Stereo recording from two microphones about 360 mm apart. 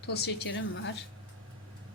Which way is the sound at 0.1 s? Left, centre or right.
Left.